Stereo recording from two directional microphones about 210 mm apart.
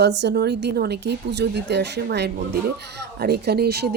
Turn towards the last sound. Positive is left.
turn(degrees=-50)  # may be behind; listen again after turning